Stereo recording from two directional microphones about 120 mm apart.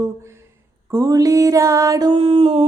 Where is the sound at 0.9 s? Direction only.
25° right (ahead or behind).